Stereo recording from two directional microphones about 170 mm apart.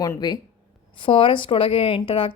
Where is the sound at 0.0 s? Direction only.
20° left (ahead or behind).